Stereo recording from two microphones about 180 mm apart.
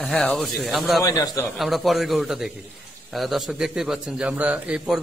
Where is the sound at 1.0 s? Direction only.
20° left (ahead or behind).